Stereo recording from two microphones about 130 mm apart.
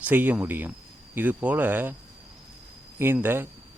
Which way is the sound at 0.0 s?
15° right (ahead or behind).